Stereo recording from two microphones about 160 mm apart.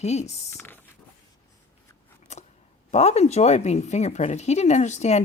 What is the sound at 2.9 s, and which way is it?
Speech, 40° left (ahead or behind).